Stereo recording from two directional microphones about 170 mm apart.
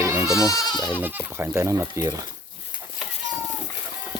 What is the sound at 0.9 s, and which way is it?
Speech, 10° right (ahead or behind).